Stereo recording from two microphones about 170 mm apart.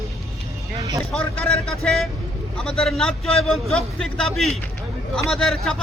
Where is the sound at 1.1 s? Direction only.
5° left (ahead or behind).